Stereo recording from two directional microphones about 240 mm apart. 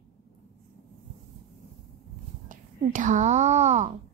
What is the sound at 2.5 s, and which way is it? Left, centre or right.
Speech, right.